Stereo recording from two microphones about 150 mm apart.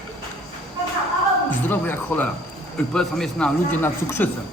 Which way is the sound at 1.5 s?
10° left (ahead or behind).